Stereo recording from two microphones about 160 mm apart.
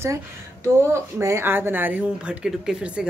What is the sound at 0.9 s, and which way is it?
Speech, 15° right (ahead or behind).